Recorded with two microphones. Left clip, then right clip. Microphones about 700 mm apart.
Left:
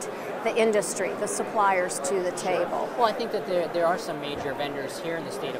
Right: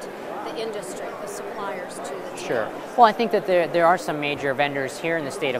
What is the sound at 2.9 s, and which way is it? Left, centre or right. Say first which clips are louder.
Speech: right 10 dB; right.